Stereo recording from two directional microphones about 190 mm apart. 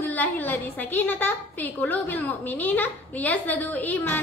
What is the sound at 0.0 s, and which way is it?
A woman's voice, 10° left (ahead or behind).